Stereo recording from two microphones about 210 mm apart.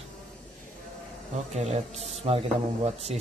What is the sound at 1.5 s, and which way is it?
Speech, 30° right (ahead or behind).